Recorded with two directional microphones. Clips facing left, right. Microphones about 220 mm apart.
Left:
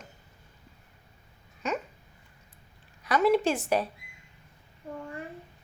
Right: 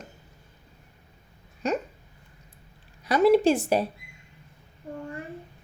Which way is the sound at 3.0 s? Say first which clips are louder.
Right 5 dB; 35° right (ahead or behind).